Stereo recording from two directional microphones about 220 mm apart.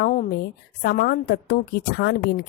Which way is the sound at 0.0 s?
35° left (ahead or behind).